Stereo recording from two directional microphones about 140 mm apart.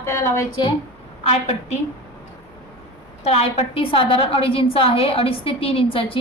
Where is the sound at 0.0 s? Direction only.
20° left (ahead or behind).